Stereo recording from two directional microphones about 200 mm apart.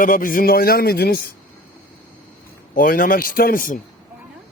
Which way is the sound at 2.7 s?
45° left (ahead or behind).